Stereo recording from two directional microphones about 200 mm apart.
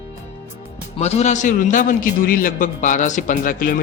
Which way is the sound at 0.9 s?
30° left (ahead or behind).